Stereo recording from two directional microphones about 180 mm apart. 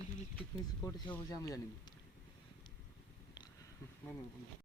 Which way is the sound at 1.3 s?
20° left (ahead or behind).